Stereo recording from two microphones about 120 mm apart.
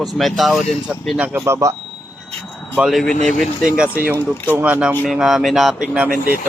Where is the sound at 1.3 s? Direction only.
20° right (ahead or behind).